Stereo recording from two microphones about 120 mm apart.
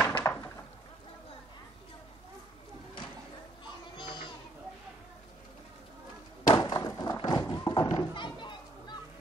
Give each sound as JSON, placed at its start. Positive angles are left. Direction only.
{"t": 0.0, "sound": "chop", "side_deg": 15}
{"t": 3.9, "sound": "children playing", "side_deg": 45}
{"t": 6.5, "sound": "a sound", "side_deg": 40}